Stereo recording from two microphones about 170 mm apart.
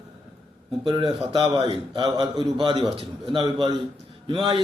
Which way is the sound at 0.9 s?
25° right (ahead or behind).